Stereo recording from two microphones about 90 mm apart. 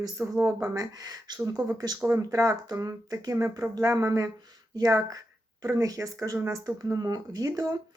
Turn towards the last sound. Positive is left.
turn(degrees=-40)  # may be behind; listen again after turning